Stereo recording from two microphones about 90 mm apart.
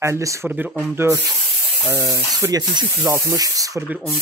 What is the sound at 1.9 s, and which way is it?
Speech, 45° right (ahead or behind).